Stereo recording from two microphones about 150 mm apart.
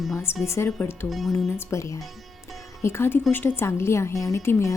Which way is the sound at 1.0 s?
Centre (ahead or behind).